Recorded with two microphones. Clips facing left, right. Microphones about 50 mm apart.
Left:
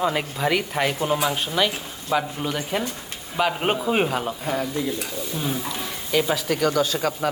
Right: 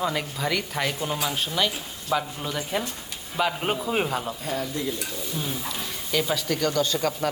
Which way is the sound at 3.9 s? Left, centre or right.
Left.